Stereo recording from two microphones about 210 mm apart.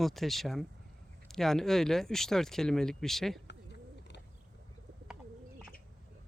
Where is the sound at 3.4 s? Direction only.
55° left (ahead or behind).